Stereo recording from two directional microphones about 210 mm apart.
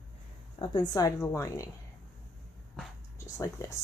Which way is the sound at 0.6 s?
20° left (ahead or behind).